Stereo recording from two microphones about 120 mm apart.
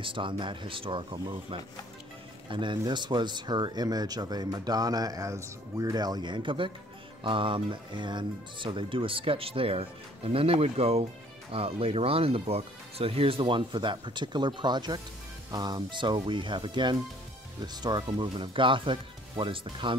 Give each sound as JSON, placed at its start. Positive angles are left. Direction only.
{"t": 0.0, "sound": "speech", "side_deg": -45}
{"t": 2.5, "sound": "speech", "side_deg": -40}